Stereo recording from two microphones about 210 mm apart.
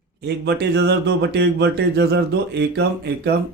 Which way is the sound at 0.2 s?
55° right (ahead or behind).